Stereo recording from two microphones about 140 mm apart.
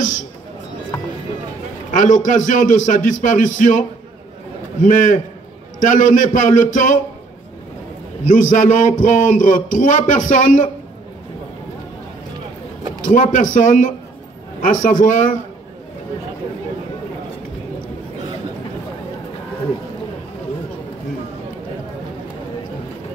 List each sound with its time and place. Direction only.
1.9 s speech: 65° left (ahead or behind)
4.8 s a man's voice: 65° left (ahead or behind)
8.3 s speech: 65° left (ahead or behind)
13.1 s a man's voice: 65° left (ahead or behind)